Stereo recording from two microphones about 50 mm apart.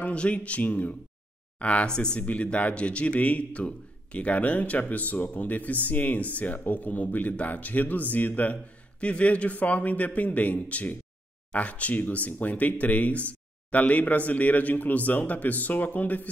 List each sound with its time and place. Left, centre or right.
0.0 s a man's voice: left